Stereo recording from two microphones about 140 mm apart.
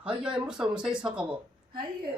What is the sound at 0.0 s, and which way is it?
Speech, 5° right (ahead or behind).